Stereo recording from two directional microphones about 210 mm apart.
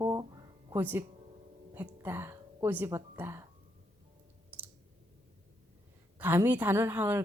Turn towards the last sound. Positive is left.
turn(degrees=-10)  # may be behind; listen again after turning